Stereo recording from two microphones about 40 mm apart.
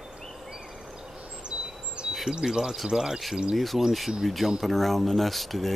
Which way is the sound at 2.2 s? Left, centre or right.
Centre.